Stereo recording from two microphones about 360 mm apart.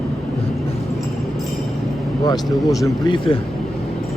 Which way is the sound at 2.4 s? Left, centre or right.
Centre.